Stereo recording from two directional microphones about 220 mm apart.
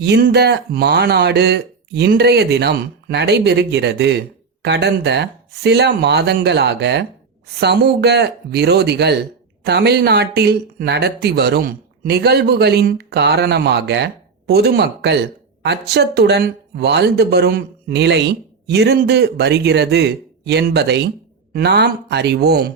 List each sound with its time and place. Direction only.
0.0 s speech: 50° right (ahead or behind)